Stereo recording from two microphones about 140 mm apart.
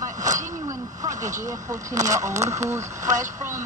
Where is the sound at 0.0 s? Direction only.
65° right (ahead or behind).